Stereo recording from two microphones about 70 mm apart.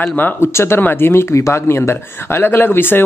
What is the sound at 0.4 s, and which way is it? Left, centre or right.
Speech, left.